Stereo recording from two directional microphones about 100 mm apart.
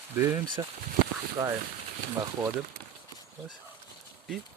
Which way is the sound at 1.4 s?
40° right (ahead or behind).